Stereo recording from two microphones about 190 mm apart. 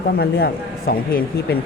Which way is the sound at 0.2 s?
55° left (ahead or behind).